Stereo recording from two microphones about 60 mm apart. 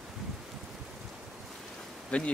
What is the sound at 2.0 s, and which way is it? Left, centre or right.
Speech, left.